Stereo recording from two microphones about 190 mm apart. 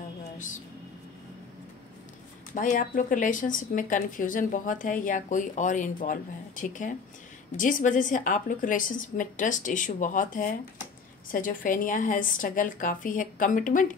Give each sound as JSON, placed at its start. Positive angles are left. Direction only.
{"t": 2.5, "sound": "speech", "side_deg": 45}